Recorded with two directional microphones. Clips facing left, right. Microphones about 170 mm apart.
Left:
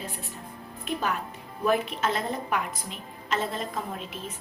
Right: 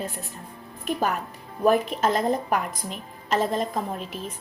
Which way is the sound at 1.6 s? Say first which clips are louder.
Right 5 dB; 40° right (ahead or behind).